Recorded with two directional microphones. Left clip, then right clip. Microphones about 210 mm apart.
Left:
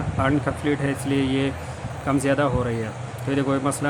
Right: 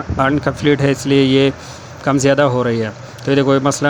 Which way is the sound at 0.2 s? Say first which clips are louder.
Right 7 dB; 35° right (ahead or behind).